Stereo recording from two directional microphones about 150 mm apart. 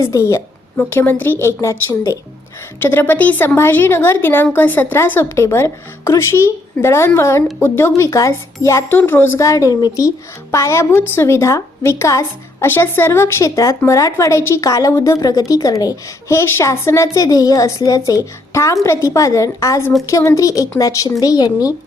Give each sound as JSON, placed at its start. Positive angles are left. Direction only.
{"t": 0.0, "sound": "a woman's voice", "side_deg": 20}